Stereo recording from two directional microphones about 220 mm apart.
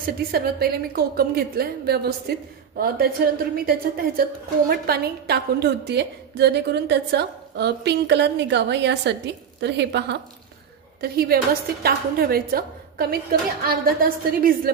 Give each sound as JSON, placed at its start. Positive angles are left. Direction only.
{"t": 0.0, "sound": "a woman's voice", "side_deg": -45}